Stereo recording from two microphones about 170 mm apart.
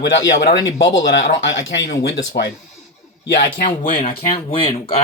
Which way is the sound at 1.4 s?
90° left.